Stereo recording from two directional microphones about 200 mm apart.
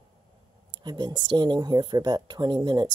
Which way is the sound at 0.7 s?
20° right (ahead or behind).